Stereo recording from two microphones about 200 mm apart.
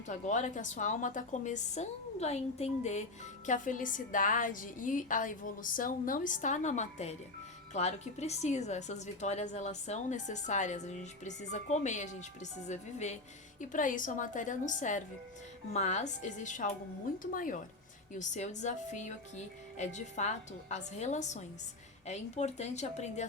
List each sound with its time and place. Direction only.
0.1 s a woman's voice: 35° left (ahead or behind)